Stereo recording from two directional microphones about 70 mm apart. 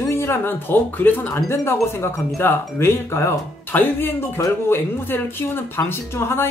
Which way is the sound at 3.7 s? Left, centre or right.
Left.